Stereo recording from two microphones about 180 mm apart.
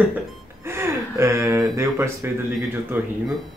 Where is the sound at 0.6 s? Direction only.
15° right (ahead or behind).